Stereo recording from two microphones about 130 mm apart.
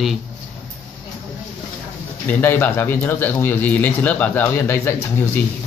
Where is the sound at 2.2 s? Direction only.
15° left (ahead or behind).